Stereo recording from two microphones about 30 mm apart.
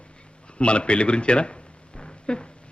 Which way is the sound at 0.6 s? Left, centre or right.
Left.